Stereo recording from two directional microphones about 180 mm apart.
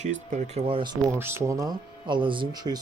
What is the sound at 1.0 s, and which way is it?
Speech, 15° right (ahead or behind).